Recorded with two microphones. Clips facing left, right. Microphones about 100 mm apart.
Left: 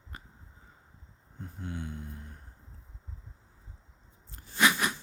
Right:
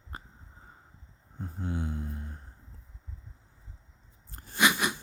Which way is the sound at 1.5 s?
30° right (ahead or behind).